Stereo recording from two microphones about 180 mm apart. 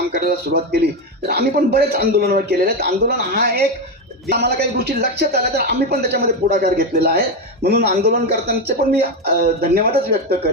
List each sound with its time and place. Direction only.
0.1 s a man's voice: 60° right (ahead or behind)